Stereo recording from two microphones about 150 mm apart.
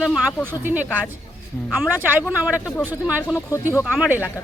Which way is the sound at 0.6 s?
10° right (ahead or behind).